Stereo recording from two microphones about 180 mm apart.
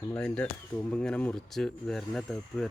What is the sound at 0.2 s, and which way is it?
Speech, 5° left (ahead or behind).